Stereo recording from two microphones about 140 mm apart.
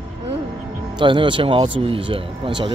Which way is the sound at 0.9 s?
35° right (ahead or behind).